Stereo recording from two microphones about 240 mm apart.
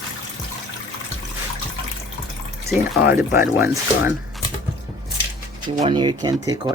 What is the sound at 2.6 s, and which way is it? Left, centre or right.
Speech, centre.